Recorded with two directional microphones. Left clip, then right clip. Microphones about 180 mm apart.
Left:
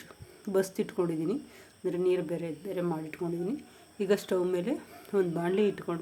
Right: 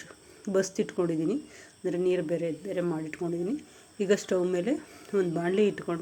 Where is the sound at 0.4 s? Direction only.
10° right (ahead or behind).